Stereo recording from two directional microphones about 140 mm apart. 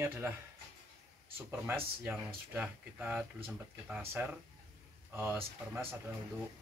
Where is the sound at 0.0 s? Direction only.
15° right (ahead or behind).